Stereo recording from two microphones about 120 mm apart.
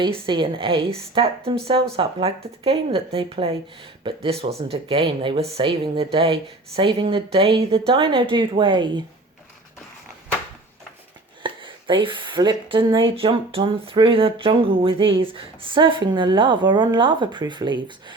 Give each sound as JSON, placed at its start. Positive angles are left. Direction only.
{"t": 0.0, "sound": "speech", "side_deg": -45}
{"t": 11.4, "sound": "speech", "side_deg": -45}